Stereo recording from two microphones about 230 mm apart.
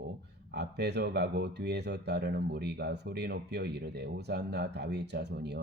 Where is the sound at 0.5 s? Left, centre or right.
Right.